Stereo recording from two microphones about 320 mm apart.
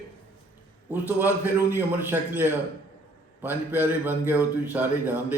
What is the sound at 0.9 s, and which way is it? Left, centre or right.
A man's voice, centre.